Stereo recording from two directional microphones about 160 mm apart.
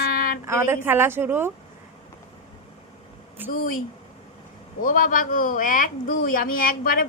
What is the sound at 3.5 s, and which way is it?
Speech, 60° left (ahead or behind).